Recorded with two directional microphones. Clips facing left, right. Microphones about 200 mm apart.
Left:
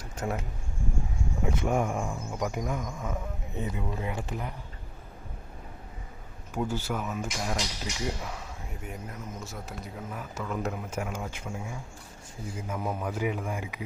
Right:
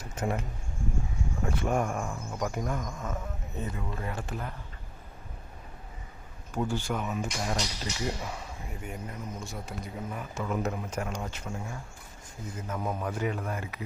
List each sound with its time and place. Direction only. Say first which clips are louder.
0.2 s speech: right 1 dB; centre (ahead or behind)
6.7 s speech: right 1 dB; 5° left (ahead or behind)